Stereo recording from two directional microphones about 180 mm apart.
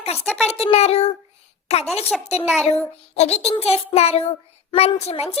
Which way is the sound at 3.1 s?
35° left (ahead or behind).